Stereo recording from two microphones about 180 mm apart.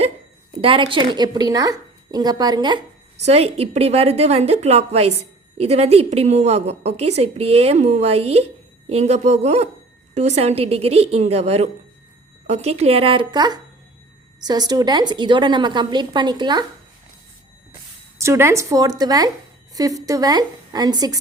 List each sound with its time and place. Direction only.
0.6 s a woman's voice: 30° right (ahead or behind)
3.2 s a woman's voice: 35° right (ahead or behind)
18.2 s a woman's voice: 15° right (ahead or behind)